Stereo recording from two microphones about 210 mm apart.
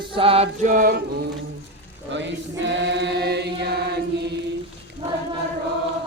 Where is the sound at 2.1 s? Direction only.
60° right (ahead or behind).